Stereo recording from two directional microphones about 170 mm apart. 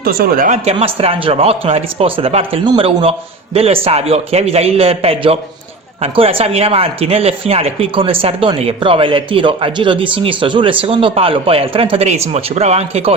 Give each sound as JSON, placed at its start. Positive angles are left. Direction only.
{"t": 0.0, "sound": "speech", "side_deg": -60}